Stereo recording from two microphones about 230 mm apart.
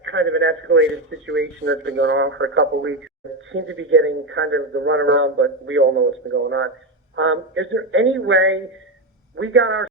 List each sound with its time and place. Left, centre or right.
0.0 s speech: right